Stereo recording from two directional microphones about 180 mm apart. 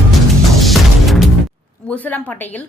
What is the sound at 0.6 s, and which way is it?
Music, centre (ahead or behind).